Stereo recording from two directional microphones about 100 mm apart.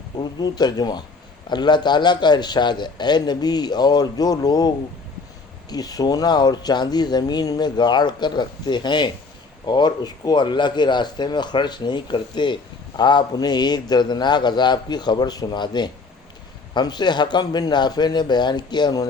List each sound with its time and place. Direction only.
0.2 s speech: 45° left (ahead or behind)